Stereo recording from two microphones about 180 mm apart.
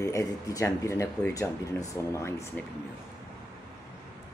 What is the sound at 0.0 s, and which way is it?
Speech, 15° left (ahead or behind).